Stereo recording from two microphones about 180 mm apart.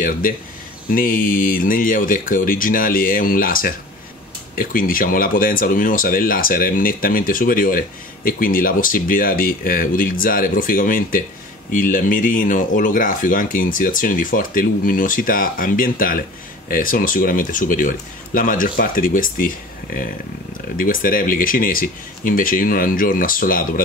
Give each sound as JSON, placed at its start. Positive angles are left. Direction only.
{"t": 0.9, "sound": "speech", "side_deg": 50}